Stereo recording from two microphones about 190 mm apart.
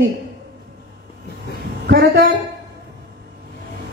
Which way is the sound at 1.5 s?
60° right (ahead or behind).